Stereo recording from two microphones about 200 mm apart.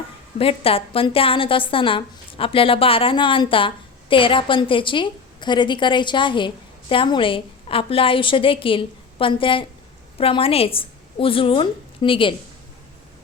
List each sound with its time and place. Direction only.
0.3 s a woman's voice: 30° left (ahead or behind)